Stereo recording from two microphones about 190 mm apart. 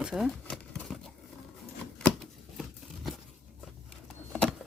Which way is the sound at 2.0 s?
5° left (ahead or behind).